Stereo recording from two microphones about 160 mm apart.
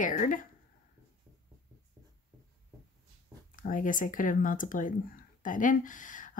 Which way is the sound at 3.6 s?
55° left (ahead or behind).